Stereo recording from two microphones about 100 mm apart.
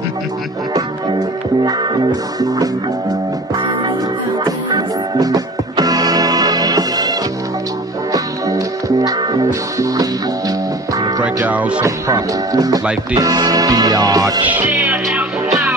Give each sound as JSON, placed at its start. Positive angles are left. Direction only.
{"t": 1.6, "sound": "music", "side_deg": -45}
{"t": 11.4, "sound": "music", "side_deg": -15}
{"t": 11.8, "sound": "music", "side_deg": -35}
{"t": 14.4, "sound": "music", "side_deg": -15}